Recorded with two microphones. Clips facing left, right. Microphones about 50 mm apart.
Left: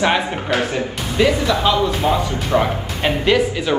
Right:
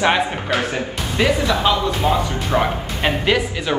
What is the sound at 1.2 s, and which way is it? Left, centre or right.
Speech, centre.